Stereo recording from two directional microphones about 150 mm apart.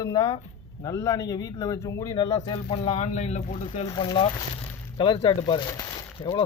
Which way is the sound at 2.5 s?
45° left (ahead or behind).